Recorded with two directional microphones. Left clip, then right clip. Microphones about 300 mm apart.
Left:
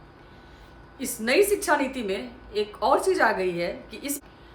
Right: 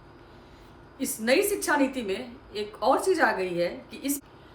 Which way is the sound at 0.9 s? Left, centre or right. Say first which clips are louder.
Left 2 dB; centre.